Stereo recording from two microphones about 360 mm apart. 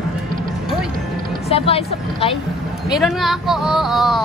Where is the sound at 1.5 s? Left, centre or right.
Centre.